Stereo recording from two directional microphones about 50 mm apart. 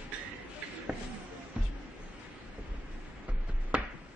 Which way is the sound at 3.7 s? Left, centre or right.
Right.